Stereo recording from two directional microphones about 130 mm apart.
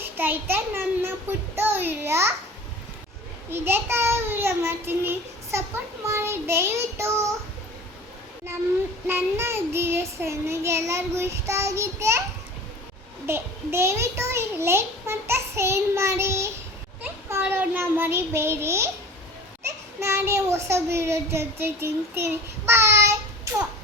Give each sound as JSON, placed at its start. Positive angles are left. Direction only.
{"t": 0.0, "sound": "a child's voice", "side_deg": -15}
{"t": 3.5, "sound": "a child's voice", "side_deg": -15}
{"t": 9.0, "sound": "a child's voice", "side_deg": -20}
{"t": 13.2, "sound": "a child's voice", "side_deg": -20}
{"t": 17.0, "sound": "child singing", "side_deg": -20}
{"t": 19.6, "sound": "a child's voice", "side_deg": -20}